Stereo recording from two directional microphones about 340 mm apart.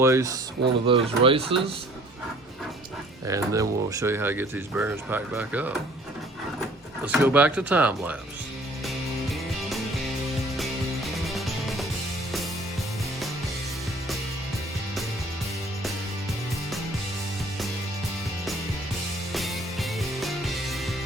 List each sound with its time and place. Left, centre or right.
0.0 s speech: centre
3.2 s speech: centre
7.0 s speech: centre
8.9 s music: centre
19.3 s music: centre